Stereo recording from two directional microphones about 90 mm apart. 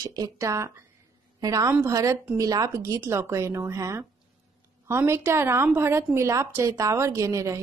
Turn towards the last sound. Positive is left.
turn(degrees=-35)  # may be behind; listen again after turning